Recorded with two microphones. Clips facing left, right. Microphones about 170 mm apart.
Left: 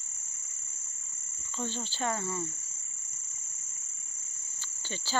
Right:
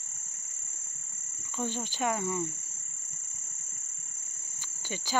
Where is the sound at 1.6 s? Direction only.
15° right (ahead or behind).